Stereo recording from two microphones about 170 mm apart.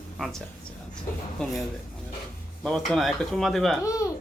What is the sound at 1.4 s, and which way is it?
Speech, centre (ahead or behind).